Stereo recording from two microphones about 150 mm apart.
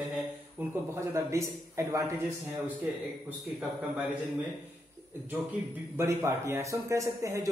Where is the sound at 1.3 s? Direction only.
20° right (ahead or behind).